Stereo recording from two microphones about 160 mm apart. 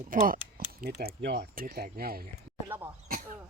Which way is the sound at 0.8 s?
80° right.